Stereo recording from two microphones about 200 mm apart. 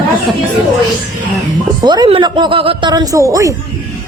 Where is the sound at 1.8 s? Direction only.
20° right (ahead or behind).